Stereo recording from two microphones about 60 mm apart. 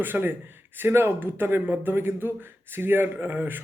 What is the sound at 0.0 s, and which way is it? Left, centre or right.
Speech, right.